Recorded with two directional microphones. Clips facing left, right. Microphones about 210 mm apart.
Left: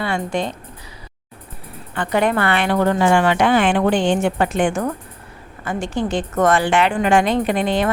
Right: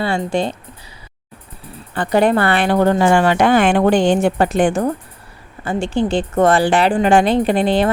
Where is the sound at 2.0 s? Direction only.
35° right (ahead or behind).